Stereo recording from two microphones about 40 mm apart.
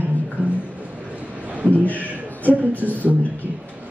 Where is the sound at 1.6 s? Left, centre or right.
Right.